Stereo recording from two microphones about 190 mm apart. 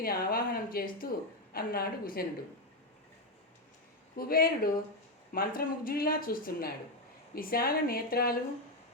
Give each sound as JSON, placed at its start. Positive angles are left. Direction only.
{"t": 0.0, "sound": "speech", "side_deg": 50}
{"t": 4.2, "sound": "speech", "side_deg": 50}